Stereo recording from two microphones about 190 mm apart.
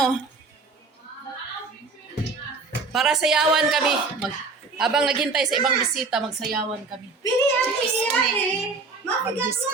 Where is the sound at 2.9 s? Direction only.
Centre (ahead or behind).